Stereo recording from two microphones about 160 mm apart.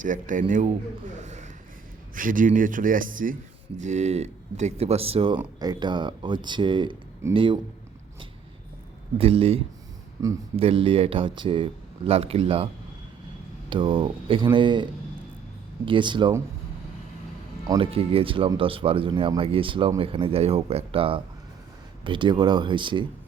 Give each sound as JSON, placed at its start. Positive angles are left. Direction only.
{"t": 0.0, "sound": "speech", "side_deg": -55}
{"t": 1.2, "sound": "a sound", "side_deg": -45}
{"t": 2.1, "sound": "speech", "side_deg": -55}
{"t": 3.8, "sound": "speech", "side_deg": -45}
{"t": 9.1, "sound": "speech", "side_deg": -35}
{"t": 10.2, "sound": "speech", "side_deg": -20}
{"t": 10.6, "sound": "speech", "side_deg": -35}
{"t": 13.7, "sound": "speech", "side_deg": -30}
{"t": 15.9, "sound": "speech", "side_deg": -30}
{"t": 17.7, "sound": "speech", "side_deg": -35}